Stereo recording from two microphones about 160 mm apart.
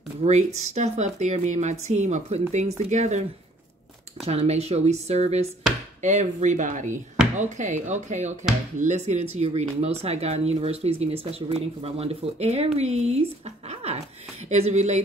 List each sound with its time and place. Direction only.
0.2 s speech: 45° right (ahead or behind)
13.7 s a sound: 40° right (ahead or behind)
14.5 s speech: 45° right (ahead or behind)